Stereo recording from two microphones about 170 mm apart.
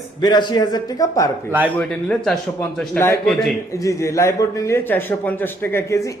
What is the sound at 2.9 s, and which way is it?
A man's voice, 15° left (ahead or behind).